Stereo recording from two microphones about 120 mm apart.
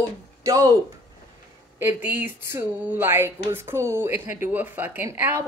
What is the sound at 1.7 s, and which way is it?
Speech, 15° right (ahead or behind).